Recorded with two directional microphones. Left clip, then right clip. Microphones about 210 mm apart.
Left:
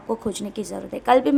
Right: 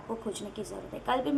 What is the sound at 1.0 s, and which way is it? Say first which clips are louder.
Speech: left 12 dB; 50° left (ahead or behind).